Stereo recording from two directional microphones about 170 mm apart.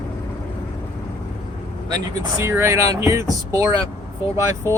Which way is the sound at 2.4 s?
15° right (ahead or behind).